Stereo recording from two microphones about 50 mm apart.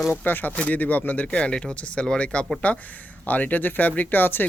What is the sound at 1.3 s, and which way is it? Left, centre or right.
Speech, left.